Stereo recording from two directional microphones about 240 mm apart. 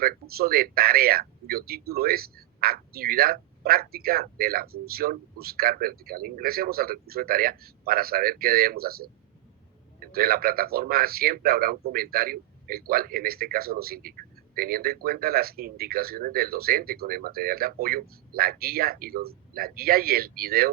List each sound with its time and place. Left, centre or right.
0.0 s speech: right